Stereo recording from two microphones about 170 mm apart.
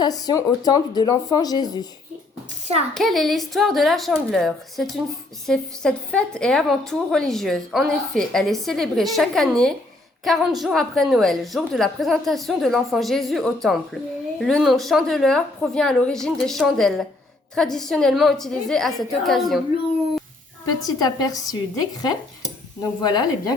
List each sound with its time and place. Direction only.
0.0 s speech: 25° left (ahead or behind)
2.9 s a woman's voice: centre (ahead or behind)
20.7 s speech: 20° left (ahead or behind)
22.8 s speech: 25° left (ahead or behind)